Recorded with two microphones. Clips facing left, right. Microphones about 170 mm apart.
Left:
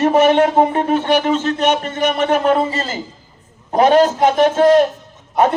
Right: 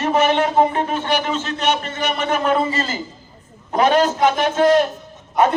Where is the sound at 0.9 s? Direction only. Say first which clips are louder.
Left 6 dB; 55° left (ahead or behind).